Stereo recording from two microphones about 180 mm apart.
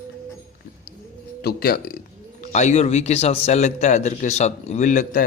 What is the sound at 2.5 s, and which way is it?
Speech, 40° left (ahead or behind).